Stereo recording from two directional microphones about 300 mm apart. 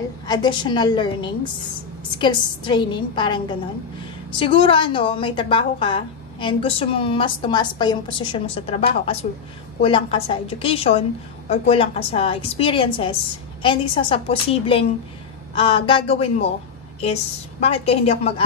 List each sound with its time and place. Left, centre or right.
0.3 s a woman's voice: centre